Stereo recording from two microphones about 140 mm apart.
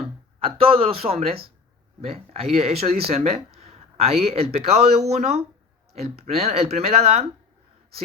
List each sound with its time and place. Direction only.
0.3 s speech: 40° right (ahead or behind)